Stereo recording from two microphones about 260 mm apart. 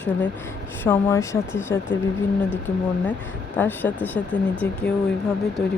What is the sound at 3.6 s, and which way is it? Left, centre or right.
Speech, centre.